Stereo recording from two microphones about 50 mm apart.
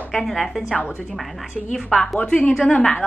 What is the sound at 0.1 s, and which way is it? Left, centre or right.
A woman's voice, centre.